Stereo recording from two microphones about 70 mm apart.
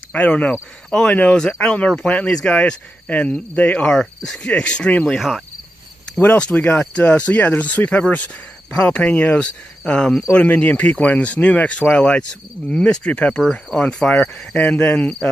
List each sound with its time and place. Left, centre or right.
0.1 s cricket: centre
5.0 s speech: centre
6.2 s speech: centre
8.7 s cricket: centre
10.3 s speech: left
13.4 s speech: centre
13.7 s cricket: centre
14.4 s speech: centre